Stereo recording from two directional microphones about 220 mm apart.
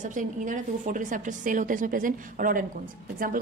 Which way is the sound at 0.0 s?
35° right (ahead or behind).